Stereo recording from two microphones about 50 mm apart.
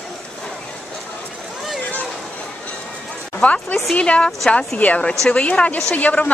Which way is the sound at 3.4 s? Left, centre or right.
Left.